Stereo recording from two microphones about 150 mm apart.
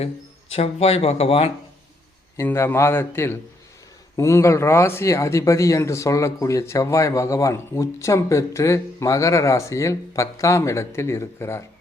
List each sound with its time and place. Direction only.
0.5 s speech: 40° left (ahead or behind)
2.3 s a man's voice: 20° left (ahead or behind)